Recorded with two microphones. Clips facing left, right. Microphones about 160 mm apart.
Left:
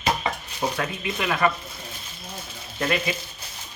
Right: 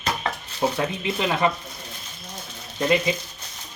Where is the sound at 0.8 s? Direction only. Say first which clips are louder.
Right 3 dB; 25° right (ahead or behind).